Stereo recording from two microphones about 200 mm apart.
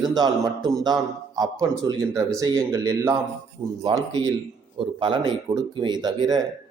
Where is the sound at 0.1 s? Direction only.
20° right (ahead or behind).